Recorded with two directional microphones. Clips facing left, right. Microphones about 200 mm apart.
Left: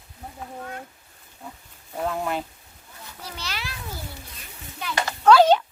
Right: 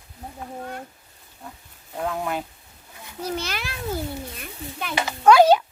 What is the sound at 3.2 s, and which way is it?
A child's voice, 50° right (ahead or behind).